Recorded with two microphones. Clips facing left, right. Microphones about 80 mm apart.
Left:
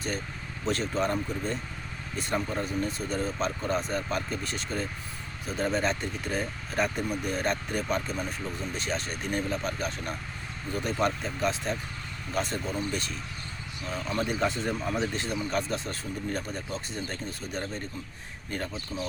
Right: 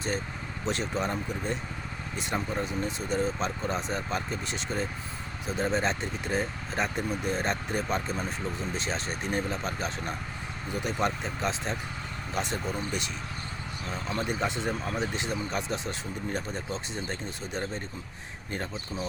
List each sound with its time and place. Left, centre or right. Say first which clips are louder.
0.6 s speech: left 2 dB; right